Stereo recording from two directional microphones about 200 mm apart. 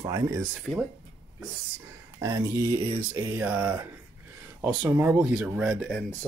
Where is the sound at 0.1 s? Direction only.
15° right (ahead or behind).